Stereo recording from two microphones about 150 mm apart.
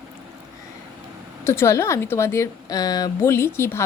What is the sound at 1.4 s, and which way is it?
A woman's voice, 20° left (ahead or behind).